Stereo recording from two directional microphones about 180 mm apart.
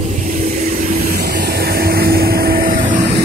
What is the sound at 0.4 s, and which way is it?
Vehicle, 50° right (ahead or behind).